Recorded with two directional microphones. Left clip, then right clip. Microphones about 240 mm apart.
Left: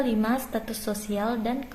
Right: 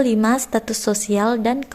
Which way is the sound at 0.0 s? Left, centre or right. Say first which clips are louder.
Right 8 dB; right.